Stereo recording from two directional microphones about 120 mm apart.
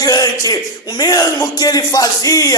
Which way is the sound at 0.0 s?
30° left (ahead or behind).